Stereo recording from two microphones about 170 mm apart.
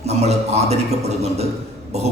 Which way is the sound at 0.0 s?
40° right (ahead or behind).